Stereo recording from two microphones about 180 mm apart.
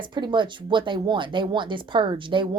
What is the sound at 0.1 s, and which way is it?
Speech, 25° right (ahead or behind).